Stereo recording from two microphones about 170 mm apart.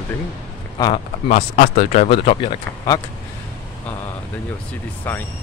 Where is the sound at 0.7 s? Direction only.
30° left (ahead or behind).